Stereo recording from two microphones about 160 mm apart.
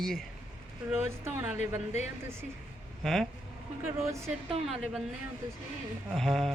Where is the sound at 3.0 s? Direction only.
Centre (ahead or behind).